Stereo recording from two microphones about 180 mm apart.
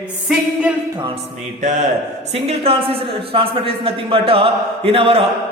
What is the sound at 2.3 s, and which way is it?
A man's voice, 35° right (ahead or behind).